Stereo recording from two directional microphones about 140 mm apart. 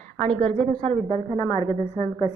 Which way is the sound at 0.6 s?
50° right (ahead or behind).